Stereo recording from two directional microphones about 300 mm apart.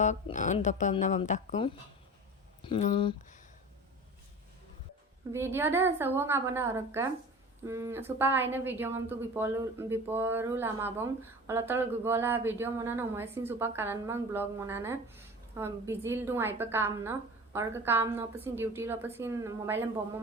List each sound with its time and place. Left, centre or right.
0.0 s speech: left
5.3 s a woman's voice: centre